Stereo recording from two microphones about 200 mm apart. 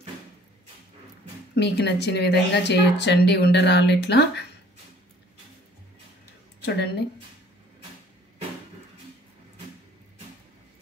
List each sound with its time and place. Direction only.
1.5 s speech: 55° left (ahead or behind)
6.6 s speech: 55° left (ahead or behind)